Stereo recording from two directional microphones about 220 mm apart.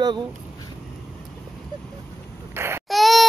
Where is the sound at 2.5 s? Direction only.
10° right (ahead or behind).